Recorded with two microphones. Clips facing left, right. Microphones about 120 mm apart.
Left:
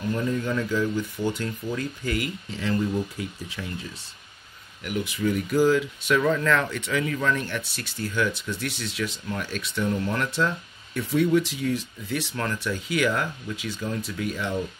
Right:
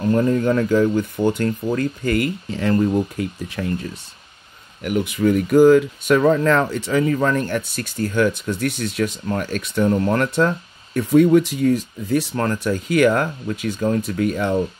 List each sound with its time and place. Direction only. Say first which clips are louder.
0.0 s speech: right 9 dB; 50° right (ahead or behind)
4.8 s speech: right 8 dB; 55° right (ahead or behind)